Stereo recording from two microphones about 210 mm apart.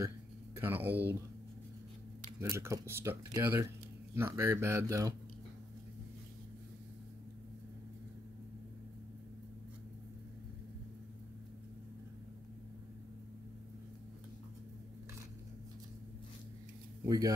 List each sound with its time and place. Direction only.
0.6 s speech: 10° right (ahead or behind)
2.5 s speech: 15° right (ahead or behind)
17.0 s a man's voice: 15° right (ahead or behind)